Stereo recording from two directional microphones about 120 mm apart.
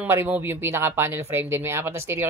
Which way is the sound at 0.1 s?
20° right (ahead or behind).